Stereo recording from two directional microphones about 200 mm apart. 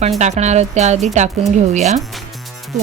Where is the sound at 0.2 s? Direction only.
35° right (ahead or behind).